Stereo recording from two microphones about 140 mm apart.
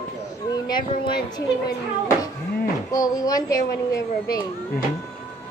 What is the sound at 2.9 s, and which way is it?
Speech, 25° left (ahead or behind).